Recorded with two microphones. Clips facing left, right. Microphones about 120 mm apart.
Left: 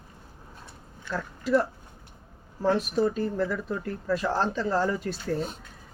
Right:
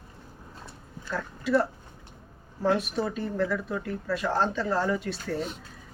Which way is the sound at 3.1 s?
40° left (ahead or behind).